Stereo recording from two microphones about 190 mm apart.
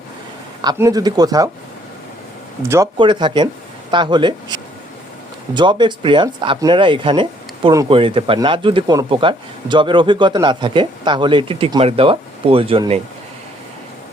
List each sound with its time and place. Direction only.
0.6 s speech: 20° right (ahead or behind)
2.6 s speech: 15° right (ahead or behind)